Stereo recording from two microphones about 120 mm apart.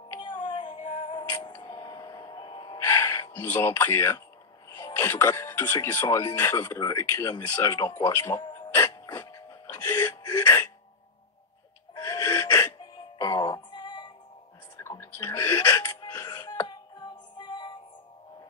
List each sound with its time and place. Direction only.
0.2 s music: 45° left (ahead or behind)
1.3 s music: 35° left (ahead or behind)
2.8 s gasp: 20° left (ahead or behind)
4.6 s a sound: 30° left (ahead or behind)
5.1 s speech: 25° left (ahead or behind)
8.5 s music: 20° left (ahead or behind)
9.3 s gasp: 30° left (ahead or behind)
11.9 s music: 30° left (ahead or behind)
14.8 s a sound: 20° left (ahead or behind)
16.0 s music: 30° left (ahead or behind)